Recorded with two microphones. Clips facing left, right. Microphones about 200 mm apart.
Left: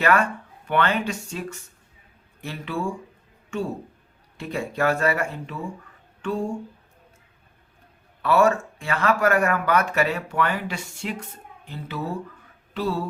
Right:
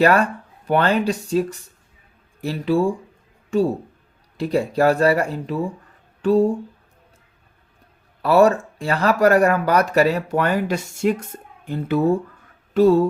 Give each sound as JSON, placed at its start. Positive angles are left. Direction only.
{"t": 0.0, "sound": "speech", "side_deg": -35}
{"t": 8.2, "sound": "speech", "side_deg": -35}